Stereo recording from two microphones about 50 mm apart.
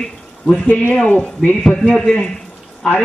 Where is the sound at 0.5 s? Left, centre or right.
Left.